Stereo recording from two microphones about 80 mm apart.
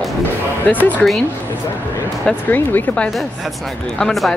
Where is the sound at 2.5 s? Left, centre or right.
Left.